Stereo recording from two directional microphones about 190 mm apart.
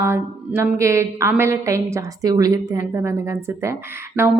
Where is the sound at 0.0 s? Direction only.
15° right (ahead or behind).